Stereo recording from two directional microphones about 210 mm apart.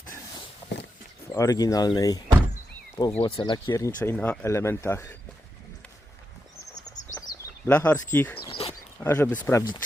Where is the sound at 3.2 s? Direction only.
25° left (ahead or behind).